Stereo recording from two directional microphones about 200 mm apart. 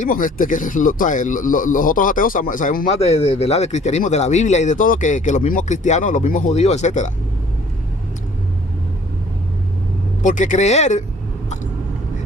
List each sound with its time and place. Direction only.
0.0 s speech: 40° left (ahead or behind)
10.2 s speech: 40° left (ahead or behind)